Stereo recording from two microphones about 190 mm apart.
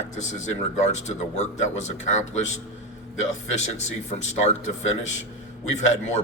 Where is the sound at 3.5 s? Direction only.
35° left (ahead or behind).